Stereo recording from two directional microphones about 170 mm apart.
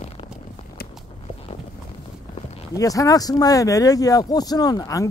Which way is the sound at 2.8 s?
20° left (ahead or behind).